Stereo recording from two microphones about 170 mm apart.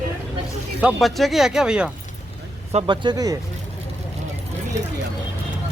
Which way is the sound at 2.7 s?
30° right (ahead or behind).